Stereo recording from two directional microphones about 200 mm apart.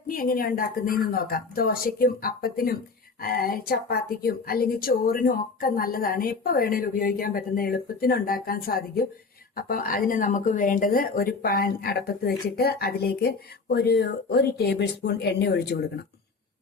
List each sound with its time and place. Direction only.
0.1 s speech: 45° left (ahead or behind)